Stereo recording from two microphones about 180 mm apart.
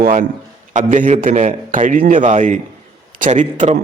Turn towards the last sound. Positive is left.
turn(degrees=-40)  # may be behind; listen again after turning